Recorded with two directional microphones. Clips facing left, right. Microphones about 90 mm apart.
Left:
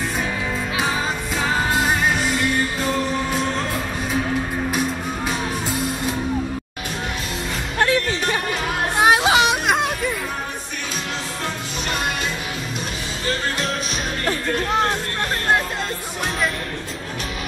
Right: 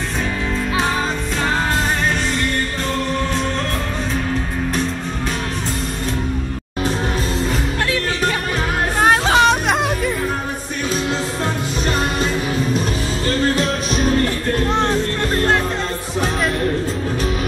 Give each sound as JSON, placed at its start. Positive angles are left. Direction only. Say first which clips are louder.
{"t": 2.3, "sound": "music", "louder": "even", "side_deg": 5}
{"t": 7.8, "sound": "music", "louder": "left 3 dB", "side_deg": 35}
{"t": 9.0, "sound": "music", "louder": "right 2 dB", "side_deg": 10}